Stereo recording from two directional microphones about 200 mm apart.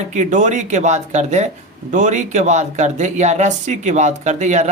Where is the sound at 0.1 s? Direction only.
35° right (ahead or behind).